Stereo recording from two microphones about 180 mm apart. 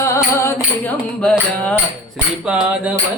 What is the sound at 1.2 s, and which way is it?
Music, 5° left (ahead or behind).